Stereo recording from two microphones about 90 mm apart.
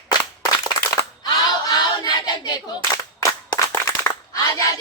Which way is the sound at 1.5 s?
50° left (ahead or behind).